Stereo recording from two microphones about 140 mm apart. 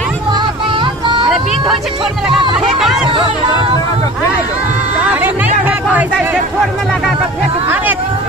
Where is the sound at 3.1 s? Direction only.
40° right (ahead or behind).